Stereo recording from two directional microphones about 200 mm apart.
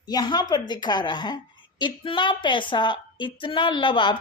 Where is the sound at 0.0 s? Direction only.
20° left (ahead or behind).